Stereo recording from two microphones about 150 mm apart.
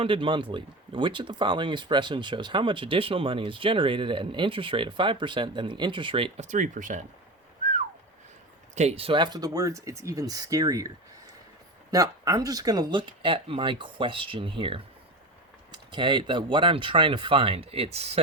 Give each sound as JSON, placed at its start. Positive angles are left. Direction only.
{"t": 0.0, "sound": "speech", "side_deg": -35}
{"t": 8.7, "sound": "speech", "side_deg": -45}